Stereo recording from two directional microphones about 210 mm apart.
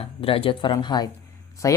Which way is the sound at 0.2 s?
25° left (ahead or behind).